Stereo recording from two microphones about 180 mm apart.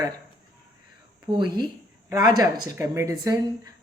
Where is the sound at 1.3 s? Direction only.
25° right (ahead or behind).